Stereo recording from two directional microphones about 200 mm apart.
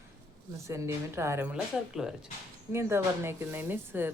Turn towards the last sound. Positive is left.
turn(degrees=-10)  # may be behind; listen again after turning